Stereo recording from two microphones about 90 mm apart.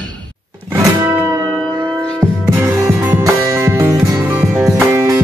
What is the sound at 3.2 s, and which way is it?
Music, 40° right (ahead or behind).